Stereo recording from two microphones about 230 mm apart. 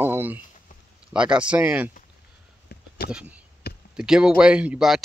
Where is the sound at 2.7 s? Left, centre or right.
Left.